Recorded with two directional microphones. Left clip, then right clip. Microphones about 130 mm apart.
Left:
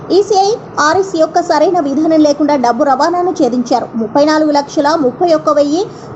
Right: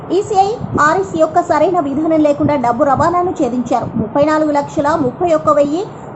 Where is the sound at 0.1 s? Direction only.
15° left (ahead or behind).